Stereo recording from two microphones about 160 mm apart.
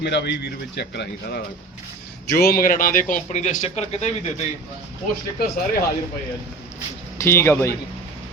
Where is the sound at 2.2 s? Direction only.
75° left (ahead or behind); by 4.1 s 45° left (ahead or behind).